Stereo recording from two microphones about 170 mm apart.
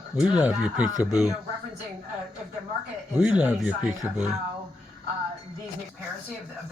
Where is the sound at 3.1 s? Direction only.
10° right (ahead or behind).